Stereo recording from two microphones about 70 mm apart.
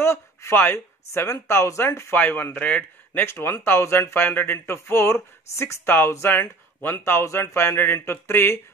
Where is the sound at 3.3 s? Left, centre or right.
Left.